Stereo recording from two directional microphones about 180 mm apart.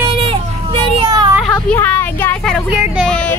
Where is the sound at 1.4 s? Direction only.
5° left (ahead or behind).